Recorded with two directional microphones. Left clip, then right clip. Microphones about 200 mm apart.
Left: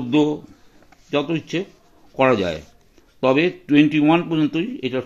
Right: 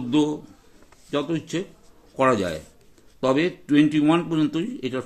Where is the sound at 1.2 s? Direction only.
25° left (ahead or behind).